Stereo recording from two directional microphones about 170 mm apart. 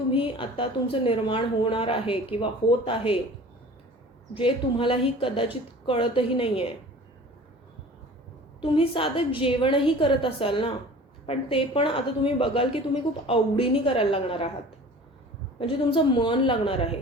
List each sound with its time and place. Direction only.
0.1 s a woman's voice: 30° left (ahead or behind)
4.4 s a woman's voice: 30° left (ahead or behind)
8.6 s a woman's voice: 30° left (ahead or behind)
15.5 s a woman's voice: 30° left (ahead or behind)